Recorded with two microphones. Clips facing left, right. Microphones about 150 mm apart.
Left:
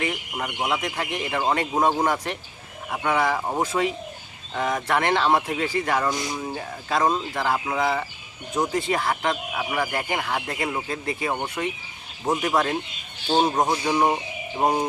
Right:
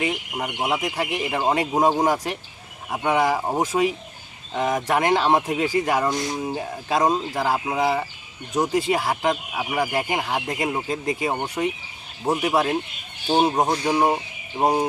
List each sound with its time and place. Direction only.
0.0 s speech: 15° right (ahead or behind)